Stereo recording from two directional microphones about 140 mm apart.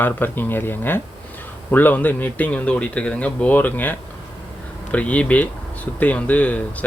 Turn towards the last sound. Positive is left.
turn(degrees=10)  # may be behind; listen again after turning